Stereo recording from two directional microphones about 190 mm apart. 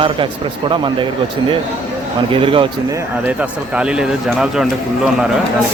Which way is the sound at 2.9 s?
10° right (ahead or behind).